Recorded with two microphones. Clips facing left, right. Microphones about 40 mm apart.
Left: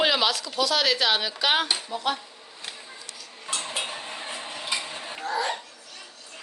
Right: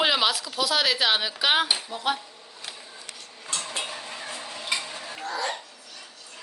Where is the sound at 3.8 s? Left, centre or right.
Left.